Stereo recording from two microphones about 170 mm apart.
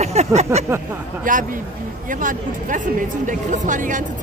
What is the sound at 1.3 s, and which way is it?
Speech, 50° right (ahead or behind).